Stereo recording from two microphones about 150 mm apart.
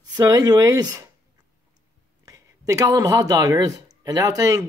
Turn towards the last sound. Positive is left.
turn(degrees=-25)  # may be behind; listen again after turning